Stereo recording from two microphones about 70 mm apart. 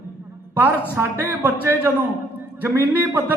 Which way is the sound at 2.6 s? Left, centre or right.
Right.